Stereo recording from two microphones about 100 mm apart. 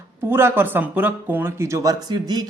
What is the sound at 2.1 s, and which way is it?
Speech, 45° right (ahead or behind).